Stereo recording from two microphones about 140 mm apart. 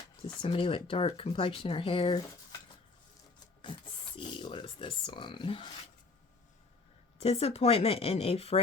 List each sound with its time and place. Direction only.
0.3 s speech: 40° left (ahead or behind)
4.2 s speech: 35° left (ahead or behind)
7.2 s speech: 45° left (ahead or behind)